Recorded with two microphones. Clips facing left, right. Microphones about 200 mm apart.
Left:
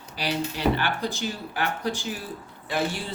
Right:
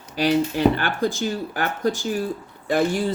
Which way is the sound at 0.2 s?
50° right (ahead or behind).